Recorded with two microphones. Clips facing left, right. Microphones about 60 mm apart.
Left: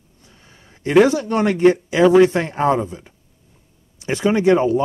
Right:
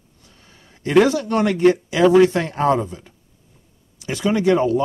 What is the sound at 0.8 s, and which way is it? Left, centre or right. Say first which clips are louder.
Speech: left 2 dB; centre.